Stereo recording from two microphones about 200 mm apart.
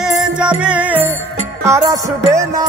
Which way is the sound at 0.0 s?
5° right (ahead or behind).